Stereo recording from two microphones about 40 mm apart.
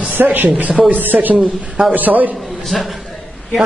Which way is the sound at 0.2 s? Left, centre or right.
Right.